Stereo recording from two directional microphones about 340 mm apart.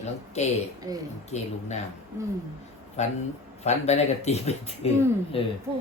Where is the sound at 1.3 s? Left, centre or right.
Centre.